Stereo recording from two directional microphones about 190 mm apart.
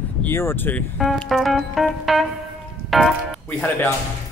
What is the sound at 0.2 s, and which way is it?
Speech, 10° left (ahead or behind).